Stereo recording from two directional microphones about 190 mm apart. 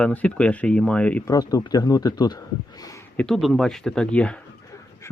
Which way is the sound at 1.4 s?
20° left (ahead or behind).